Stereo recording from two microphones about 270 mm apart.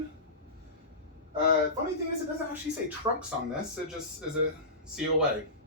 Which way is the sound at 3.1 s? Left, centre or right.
Centre.